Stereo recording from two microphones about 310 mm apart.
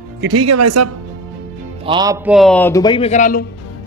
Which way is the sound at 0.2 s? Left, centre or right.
Right.